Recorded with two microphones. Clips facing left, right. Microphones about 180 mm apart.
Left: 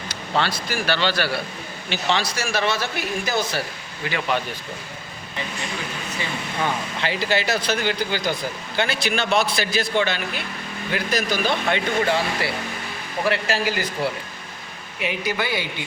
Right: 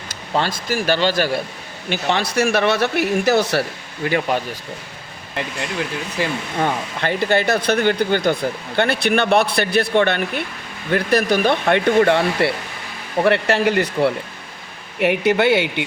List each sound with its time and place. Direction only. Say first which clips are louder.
0.1 s a man's voice: right 2 dB; 45° right (ahead or behind); by 3.6 s 70° right (ahead or behind)
4.0 s a man's voice: right 5 dB; 45° right (ahead or behind)
6.6 s speech: right 4 dB; 55° right (ahead or behind)